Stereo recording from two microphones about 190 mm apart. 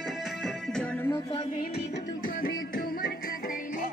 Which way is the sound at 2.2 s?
50° left (ahead or behind).